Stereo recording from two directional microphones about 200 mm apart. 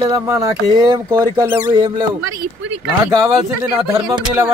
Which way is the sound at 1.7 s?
20° right (ahead or behind).